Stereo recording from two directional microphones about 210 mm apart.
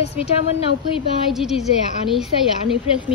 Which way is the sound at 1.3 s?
Centre (ahead or behind).